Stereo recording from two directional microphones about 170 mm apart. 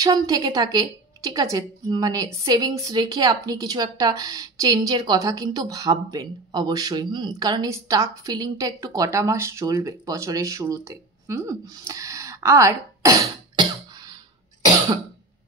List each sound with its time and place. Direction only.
0.0 s a woman's voice: 25° right (ahead or behind)